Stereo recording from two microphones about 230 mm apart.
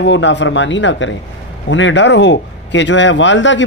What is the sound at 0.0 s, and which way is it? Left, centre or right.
A man's voice, left.